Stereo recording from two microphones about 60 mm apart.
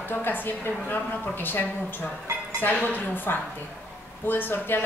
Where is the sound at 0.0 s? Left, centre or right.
Left.